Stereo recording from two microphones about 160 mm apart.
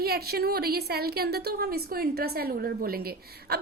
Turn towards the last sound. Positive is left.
turn(degrees=-75)  # may be behind; listen again after turning